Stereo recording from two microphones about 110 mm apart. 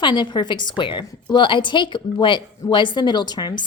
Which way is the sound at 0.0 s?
45° left (ahead or behind).